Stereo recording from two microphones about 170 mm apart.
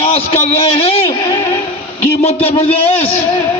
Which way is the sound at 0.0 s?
35° left (ahead or behind).